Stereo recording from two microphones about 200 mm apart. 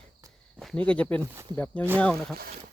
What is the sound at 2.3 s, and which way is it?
Speech, 50° right (ahead or behind).